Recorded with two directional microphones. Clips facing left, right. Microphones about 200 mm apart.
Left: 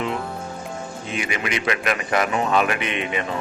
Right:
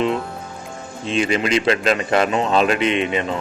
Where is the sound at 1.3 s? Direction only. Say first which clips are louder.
Right 6 dB; 25° right (ahead or behind).